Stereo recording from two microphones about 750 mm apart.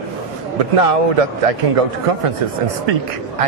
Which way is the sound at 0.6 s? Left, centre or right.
Right.